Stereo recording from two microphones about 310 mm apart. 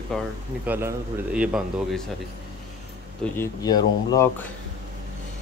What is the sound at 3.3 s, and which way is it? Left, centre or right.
Speech, centre.